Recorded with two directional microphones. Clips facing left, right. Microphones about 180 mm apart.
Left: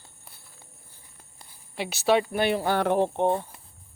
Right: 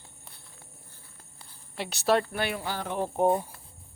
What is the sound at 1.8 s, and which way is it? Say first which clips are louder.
Speech: left 2 dB; centre (ahead or behind).